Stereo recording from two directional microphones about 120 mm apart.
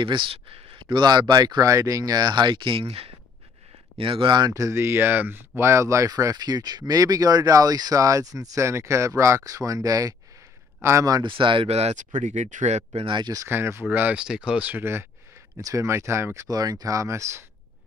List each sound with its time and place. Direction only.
0.0 s speech: 40° right (ahead or behind)
11.2 s speech: 45° right (ahead or behind); by 13.1 s 65° right (ahead or behind)
13.1 s speech: 35° right (ahead or behind)
13.5 s speech: 20° right (ahead or behind)